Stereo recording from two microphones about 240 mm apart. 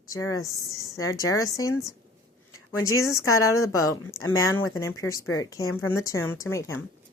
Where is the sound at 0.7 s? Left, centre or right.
Centre.